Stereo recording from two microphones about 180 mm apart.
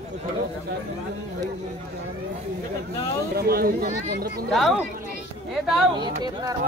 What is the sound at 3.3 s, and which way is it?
Speech, 60° right (ahead or behind).